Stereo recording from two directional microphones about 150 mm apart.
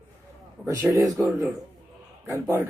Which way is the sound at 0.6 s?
20° right (ahead or behind).